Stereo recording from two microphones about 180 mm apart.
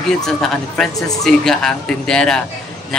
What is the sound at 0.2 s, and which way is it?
Speech, centre (ahead or behind).